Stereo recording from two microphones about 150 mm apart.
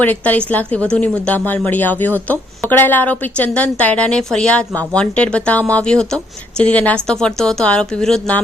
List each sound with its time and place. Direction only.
0.0 s speech: 10° left (ahead or behind)